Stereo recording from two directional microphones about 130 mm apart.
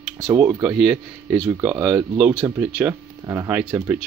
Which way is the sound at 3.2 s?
25° right (ahead or behind).